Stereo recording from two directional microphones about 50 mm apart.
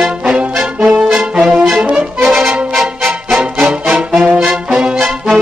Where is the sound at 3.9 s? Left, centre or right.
Right.